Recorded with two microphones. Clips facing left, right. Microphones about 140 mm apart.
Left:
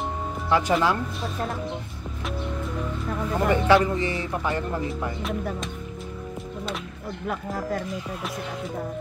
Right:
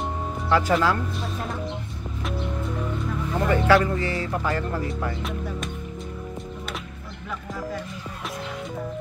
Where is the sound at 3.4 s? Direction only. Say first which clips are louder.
Even; 20° left (ahead or behind).